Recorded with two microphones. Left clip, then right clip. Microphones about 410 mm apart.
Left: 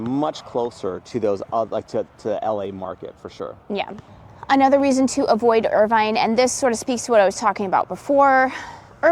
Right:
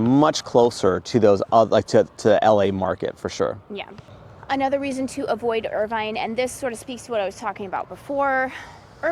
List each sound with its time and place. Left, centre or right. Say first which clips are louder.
0.1 s speech: right 5 dB; right
4.4 s a woman's voice: left 7 dB; left